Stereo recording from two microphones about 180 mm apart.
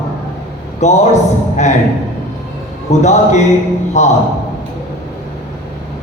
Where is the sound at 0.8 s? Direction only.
40° left (ahead or behind).